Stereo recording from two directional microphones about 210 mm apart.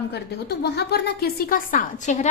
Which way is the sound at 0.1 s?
50° left (ahead or behind).